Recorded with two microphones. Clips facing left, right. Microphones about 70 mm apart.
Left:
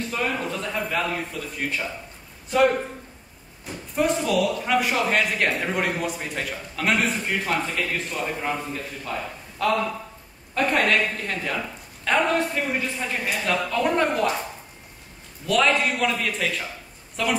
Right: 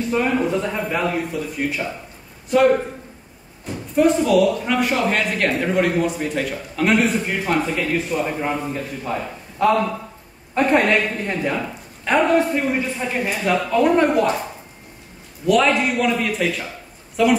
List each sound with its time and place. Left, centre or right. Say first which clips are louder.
0.1 s a man's voice: right 9 dB; centre
3.6 s a man's voice: right 7 dB; centre
15.4 s speech: right 4 dB; centre